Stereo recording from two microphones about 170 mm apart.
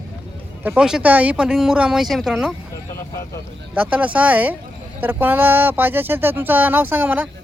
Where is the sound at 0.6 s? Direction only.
5° right (ahead or behind).